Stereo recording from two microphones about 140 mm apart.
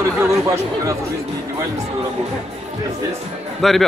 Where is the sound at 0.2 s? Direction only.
20° right (ahead or behind).